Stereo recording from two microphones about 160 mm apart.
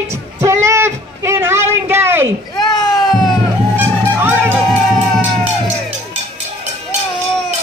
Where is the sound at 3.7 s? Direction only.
10° right (ahead or behind).